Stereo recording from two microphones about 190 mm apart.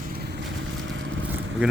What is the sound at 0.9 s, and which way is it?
Vehicle, 80° right.